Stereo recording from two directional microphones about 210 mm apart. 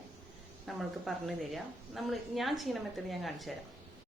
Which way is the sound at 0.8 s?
Centre (ahead or behind).